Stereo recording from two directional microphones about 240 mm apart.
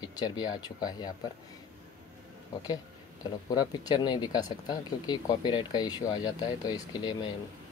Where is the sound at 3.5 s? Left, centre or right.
Centre.